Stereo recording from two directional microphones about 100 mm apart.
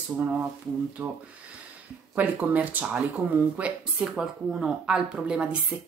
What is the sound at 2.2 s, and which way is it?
Speech, 15° right (ahead or behind).